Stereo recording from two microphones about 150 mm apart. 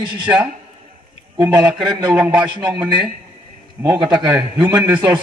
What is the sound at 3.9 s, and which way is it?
Speech, 10° right (ahead or behind).